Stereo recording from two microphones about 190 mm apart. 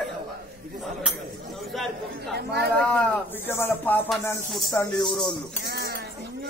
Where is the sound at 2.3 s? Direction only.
60° right (ahead or behind).